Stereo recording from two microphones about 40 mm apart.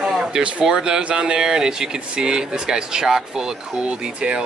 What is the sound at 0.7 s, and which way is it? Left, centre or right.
Speech, centre.